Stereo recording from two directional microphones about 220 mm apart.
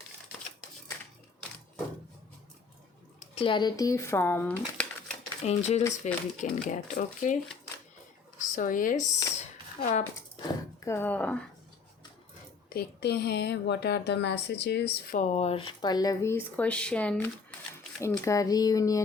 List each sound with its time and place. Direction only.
3.2 s speech: 25° left (ahead or behind); by 5.1 s 5° left (ahead or behind)
5.5 s speech: 30° left (ahead or behind)
5.8 s speech: 10° left (ahead or behind)
6.4 s speech: 35° left (ahead or behind)
8.4 s speech: 35° left (ahead or behind)
9.4 s a sound: 30° left (ahead or behind)
10.8 s speech: 10° left (ahead or behind)
12.7 s speech: 50° left (ahead or behind)
15.2 s speech: 30° left (ahead or behind)